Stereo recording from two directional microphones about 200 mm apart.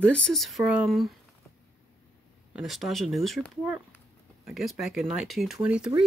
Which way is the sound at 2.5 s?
Centre (ahead or behind).